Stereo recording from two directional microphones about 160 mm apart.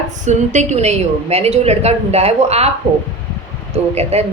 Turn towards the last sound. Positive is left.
turn(degrees=-40)  # may be behind; listen again after turning